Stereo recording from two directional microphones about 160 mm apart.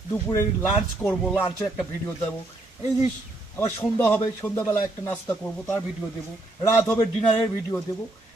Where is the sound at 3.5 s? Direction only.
10° left (ahead or behind).